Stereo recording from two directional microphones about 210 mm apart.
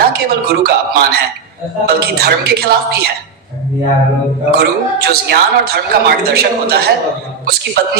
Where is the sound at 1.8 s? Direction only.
50° right (ahead or behind).